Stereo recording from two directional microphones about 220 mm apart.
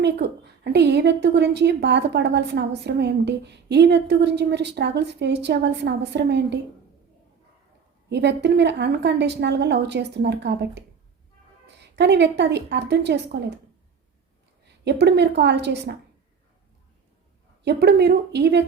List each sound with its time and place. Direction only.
0.0 s a woman's voice: 50° right (ahead or behind)
8.1 s a woman's voice: 50° right (ahead or behind)
14.7 s a woman's voice: 50° right (ahead or behind)
17.6 s a woman's voice: 50° right (ahead or behind)